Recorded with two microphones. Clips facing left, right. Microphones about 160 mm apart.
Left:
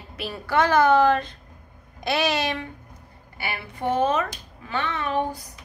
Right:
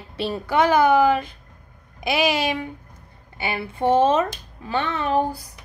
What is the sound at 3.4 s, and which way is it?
Speech, 25° right (ahead or behind).